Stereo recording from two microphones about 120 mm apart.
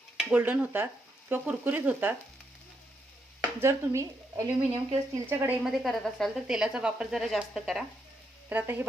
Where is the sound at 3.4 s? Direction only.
20° right (ahead or behind).